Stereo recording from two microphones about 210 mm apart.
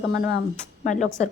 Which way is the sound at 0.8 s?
35° left (ahead or behind).